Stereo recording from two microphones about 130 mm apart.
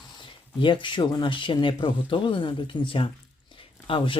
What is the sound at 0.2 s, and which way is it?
Speech, 40° left (ahead or behind).